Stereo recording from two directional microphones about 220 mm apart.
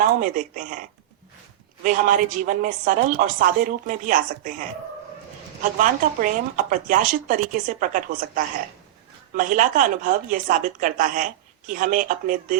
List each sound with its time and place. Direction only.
0.0 s a woman's voice: 35° right (ahead or behind)
5.8 s a woman's voice: 35° right (ahead or behind)